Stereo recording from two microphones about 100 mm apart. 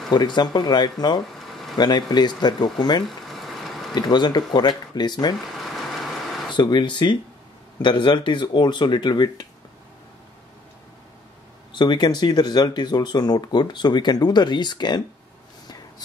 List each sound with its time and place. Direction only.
0.1 s speech: 45° left (ahead or behind)
1.4 s a sound: centre (ahead or behind)
1.8 s speech: 45° left (ahead or behind)
3.1 s vehicle: centre (ahead or behind)
3.9 s speech: 45° left (ahead or behind)
5.6 s vehicle: centre (ahead or behind)
6.5 s speech: 50° left (ahead or behind)
11.7 s speech: 45° left (ahead or behind)